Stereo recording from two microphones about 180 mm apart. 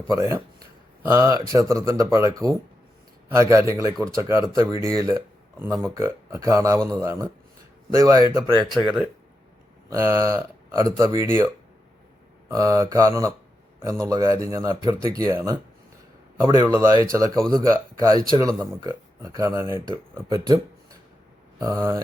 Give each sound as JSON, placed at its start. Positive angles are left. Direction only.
{"t": 0.1, "sound": "speech", "side_deg": -15}
{"t": 8.7, "sound": "speech", "side_deg": 0}
{"t": 9.9, "sound": "speech", "side_deg": -15}
{"t": 12.5, "sound": "speech", "side_deg": -15}
{"t": 16.9, "sound": "speech", "side_deg": -20}
{"t": 21.6, "sound": "speech", "side_deg": -15}